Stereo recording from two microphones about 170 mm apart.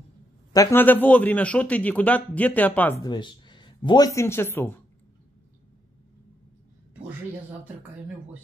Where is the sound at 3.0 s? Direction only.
25° left (ahead or behind).